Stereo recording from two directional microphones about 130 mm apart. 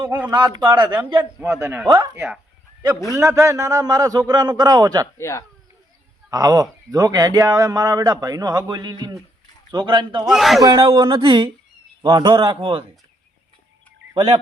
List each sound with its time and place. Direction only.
0.3 s a man's voice: 35° right (ahead or behind)
1.2 s a man's voice: 20° right (ahead or behind)
3.1 s a man's voice: 25° right (ahead or behind)
5.1 s speech: 20° left (ahead or behind)
6.3 s a man's voice: 30° right (ahead or behind)
10.2 s a man's voice: centre (ahead or behind)
10.6 s a man's voice: 30° right (ahead or behind)
14.2 s speech: 50° right (ahead or behind)